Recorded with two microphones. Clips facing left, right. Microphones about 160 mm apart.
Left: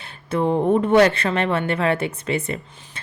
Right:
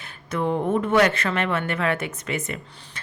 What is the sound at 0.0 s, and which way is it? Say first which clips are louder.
Speech: left 4 dB; 25° left (ahead or behind).